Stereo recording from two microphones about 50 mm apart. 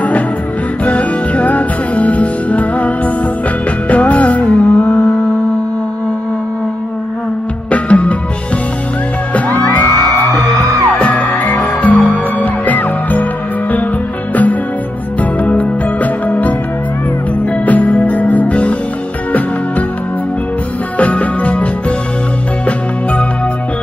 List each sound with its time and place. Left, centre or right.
0.8 s music: left
3.9 s music: left
7.7 s music: left
9.3 s music: left
11.0 s music: left
17.6 s music: left
21.0 s music: left